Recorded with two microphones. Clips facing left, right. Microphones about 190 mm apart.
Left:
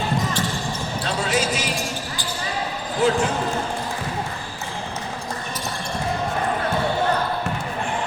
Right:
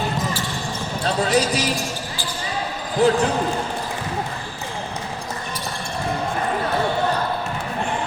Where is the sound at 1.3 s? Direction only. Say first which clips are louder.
Right 3 dB; 35° right (ahead or behind).